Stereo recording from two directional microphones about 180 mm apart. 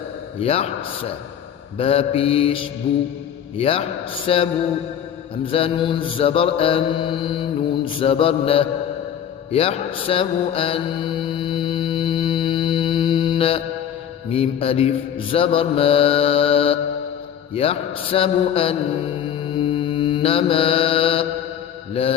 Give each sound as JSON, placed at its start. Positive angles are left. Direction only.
{"t": 0.3, "sound": "mantra", "side_deg": 35}